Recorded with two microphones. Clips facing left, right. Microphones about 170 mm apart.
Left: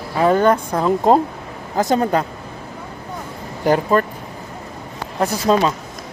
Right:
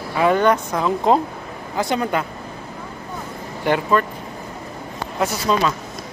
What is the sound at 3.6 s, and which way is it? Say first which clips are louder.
Speech: left 3 dB; 40° left (ahead or behind).